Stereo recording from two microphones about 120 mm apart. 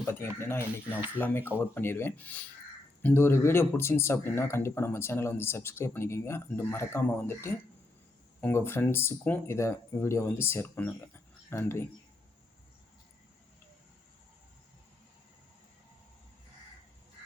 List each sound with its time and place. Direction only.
0.0 s speech: 20° left (ahead or behind)